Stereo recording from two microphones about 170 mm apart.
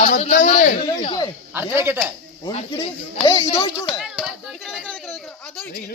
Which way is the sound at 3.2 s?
30° left (ahead or behind).